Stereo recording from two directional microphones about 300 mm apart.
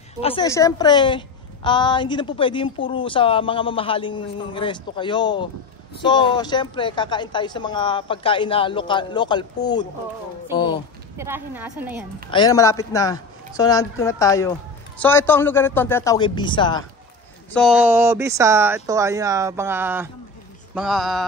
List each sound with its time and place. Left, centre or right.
0.2 s a woman's voice: centre
11.1 s speech: centre
12.3 s a woman's voice: centre
17.5 s speech: centre